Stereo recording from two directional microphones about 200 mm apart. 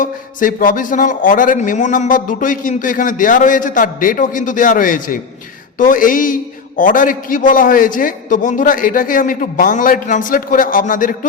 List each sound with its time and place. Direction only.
0.0 s a man's voice: 40° left (ahead or behind)